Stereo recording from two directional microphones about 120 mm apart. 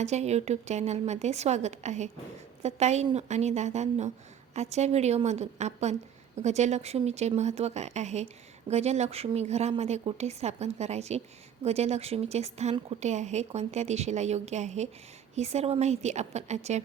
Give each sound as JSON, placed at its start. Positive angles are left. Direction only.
{"t": 0.0, "sound": "a woman's voice", "side_deg": -70}